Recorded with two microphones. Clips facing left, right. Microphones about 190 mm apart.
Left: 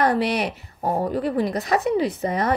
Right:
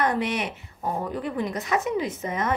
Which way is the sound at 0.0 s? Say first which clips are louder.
Left 4 dB; 35° left (ahead or behind).